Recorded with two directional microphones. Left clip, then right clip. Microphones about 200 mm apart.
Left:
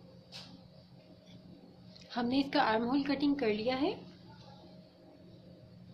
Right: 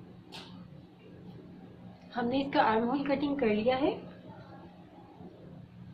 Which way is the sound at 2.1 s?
55° left (ahead or behind).